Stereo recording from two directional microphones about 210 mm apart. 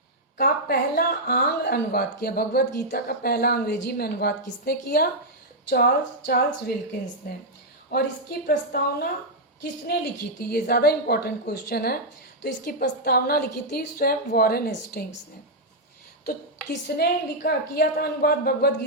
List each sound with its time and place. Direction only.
0.3 s a woman's voice: 45° left (ahead or behind)
17.0 s a woman's voice: 45° left (ahead or behind)